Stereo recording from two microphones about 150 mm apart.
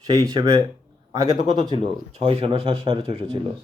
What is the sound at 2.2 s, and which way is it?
Speech, 35° right (ahead or behind).